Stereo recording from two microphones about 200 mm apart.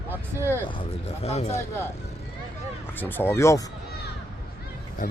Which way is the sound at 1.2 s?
30° left (ahead or behind).